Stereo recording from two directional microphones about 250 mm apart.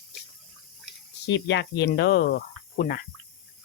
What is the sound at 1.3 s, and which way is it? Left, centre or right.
Speech, left.